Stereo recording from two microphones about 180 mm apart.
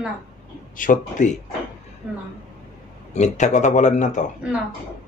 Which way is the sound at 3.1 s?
40° left (ahead or behind).